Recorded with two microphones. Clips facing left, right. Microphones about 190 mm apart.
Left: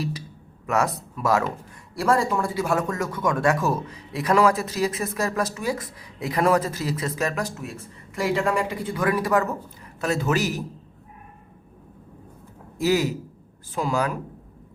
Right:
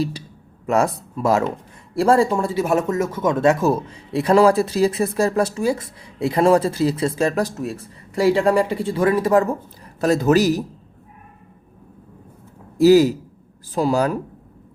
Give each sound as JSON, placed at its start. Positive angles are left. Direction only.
{"t": 0.7, "sound": "speech", "side_deg": -30}
{"t": 12.7, "sound": "a man's voice", "side_deg": -35}